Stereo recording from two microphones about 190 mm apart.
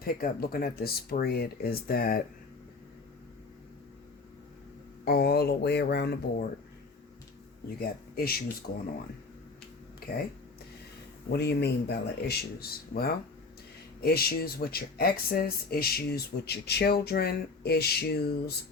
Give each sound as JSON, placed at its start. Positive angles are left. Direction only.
{"t": 0.0, "sound": "speech", "side_deg": 50}
{"t": 5.0, "sound": "speech", "side_deg": 55}
{"t": 7.8, "sound": "speech", "side_deg": 55}
{"t": 10.0, "sound": "a sound", "side_deg": 55}
{"t": 11.3, "sound": "speech", "side_deg": 60}